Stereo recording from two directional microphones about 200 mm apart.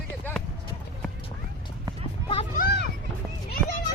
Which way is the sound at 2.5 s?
50° left (ahead or behind).